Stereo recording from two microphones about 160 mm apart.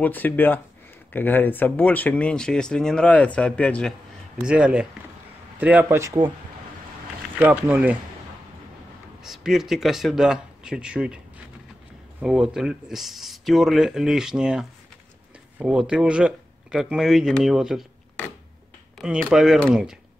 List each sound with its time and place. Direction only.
0.0 s speech: 10° left (ahead or behind)
4.5 s a man's voice: 5° right (ahead or behind)
7.3 s a man's voice: 10° right (ahead or behind)
9.2 s speech: centre (ahead or behind)
12.2 s speech: 5° right (ahead or behind)
19.2 s speech: centre (ahead or behind)